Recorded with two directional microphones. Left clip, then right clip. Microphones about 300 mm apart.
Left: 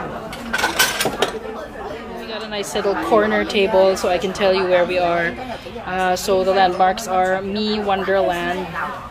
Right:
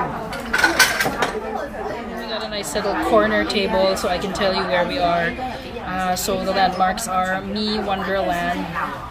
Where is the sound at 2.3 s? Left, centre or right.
Centre.